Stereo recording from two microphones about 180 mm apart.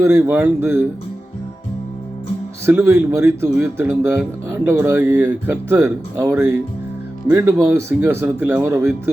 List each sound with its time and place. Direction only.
0.0 s speech: 15° right (ahead or behind)
2.6 s speech: 10° right (ahead or behind)